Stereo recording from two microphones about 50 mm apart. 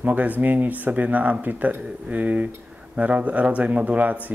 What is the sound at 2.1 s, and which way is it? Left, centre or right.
Speech, right.